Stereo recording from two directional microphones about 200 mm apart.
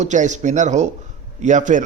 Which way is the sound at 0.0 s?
35° right (ahead or behind).